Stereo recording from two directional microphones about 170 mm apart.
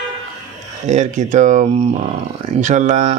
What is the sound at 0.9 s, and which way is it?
Speech, 45° right (ahead or behind).